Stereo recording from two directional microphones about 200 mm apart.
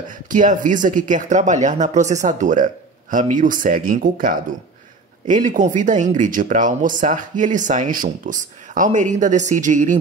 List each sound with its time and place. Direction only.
0.3 s speech: 40° right (ahead or behind)